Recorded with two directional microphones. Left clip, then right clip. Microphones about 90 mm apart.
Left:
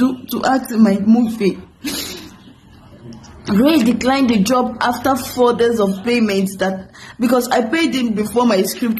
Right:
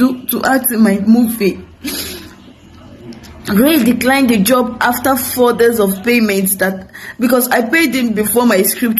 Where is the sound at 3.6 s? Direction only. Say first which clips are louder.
Right 2 dB; 30° left (ahead or behind).